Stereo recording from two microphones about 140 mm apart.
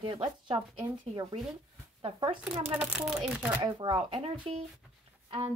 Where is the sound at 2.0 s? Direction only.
35° right (ahead or behind).